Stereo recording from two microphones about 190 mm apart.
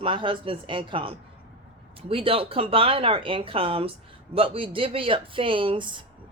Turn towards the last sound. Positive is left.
turn(degrees=-25)  # may be behind; listen again after turning